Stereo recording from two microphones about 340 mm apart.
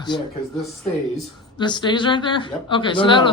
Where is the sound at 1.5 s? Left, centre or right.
Centre.